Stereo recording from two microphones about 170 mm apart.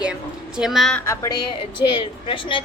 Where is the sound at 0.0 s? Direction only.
5° right (ahead or behind).